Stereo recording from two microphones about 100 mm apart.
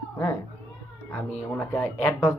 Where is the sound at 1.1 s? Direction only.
20° left (ahead or behind).